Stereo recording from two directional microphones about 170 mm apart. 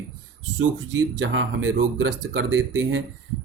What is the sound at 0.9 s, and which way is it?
Speech, 90° right.